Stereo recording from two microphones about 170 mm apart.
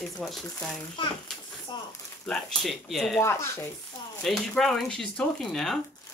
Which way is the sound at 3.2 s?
15° left (ahead or behind).